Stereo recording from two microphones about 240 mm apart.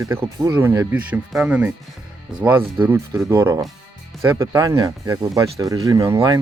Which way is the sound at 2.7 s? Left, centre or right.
Centre.